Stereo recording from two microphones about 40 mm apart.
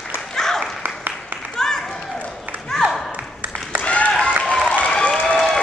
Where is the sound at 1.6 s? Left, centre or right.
Centre.